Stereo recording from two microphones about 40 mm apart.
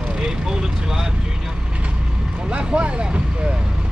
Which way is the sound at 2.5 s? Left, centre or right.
Right.